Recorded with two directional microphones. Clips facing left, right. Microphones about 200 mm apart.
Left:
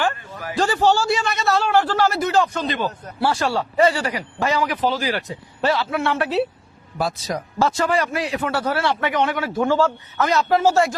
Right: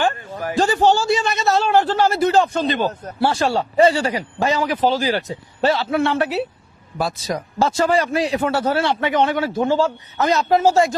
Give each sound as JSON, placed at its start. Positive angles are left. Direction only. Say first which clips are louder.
{"t": 0.3, "sound": "a sound", "louder": "right 5 dB", "side_deg": -45}
{"t": 0.6, "sound": "a man's voice", "louder": "right 2 dB", "side_deg": -20}
{"t": 3.2, "sound": "a man's voice", "louder": "right 2 dB", "side_deg": -25}
{"t": 7.6, "sound": "a man's voice", "louder": "right 2 dB", "side_deg": -30}